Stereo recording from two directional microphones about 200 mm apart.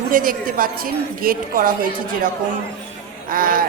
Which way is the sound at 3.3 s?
45° right (ahead or behind).